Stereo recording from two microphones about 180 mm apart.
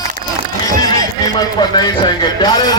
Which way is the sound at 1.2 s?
25° left (ahead or behind).